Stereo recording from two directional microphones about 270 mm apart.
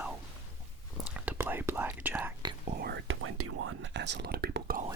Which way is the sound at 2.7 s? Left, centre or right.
Right.